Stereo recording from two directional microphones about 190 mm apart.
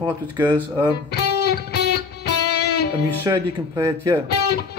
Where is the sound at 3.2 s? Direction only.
15° right (ahead or behind).